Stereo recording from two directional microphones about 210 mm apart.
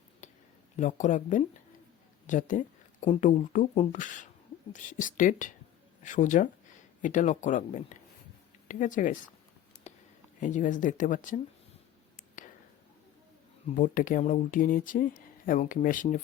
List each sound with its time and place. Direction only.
0.8 s speech: 35° left (ahead or behind)
2.2 s a sound: 35° left (ahead or behind)
3.2 s speech: 35° left (ahead or behind)
9.9 s a sound: 35° left (ahead or behind)
10.4 s speech: 35° left (ahead or behind)
13.7 s speech: 40° left (ahead or behind)